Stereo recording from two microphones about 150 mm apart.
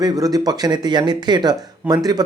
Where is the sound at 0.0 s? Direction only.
25° right (ahead or behind).